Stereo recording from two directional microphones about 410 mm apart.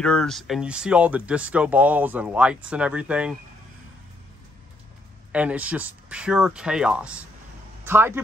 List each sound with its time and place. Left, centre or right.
0.0 s speech: centre
5.3 s speech: centre